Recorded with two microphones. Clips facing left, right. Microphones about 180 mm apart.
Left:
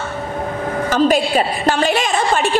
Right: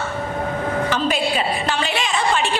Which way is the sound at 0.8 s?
45° left (ahead or behind).